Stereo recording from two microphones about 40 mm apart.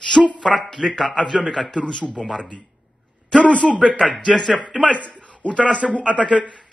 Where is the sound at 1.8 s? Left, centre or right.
Centre.